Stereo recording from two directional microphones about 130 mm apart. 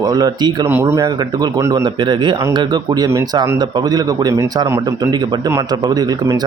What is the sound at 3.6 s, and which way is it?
Speech, 30° right (ahead or behind).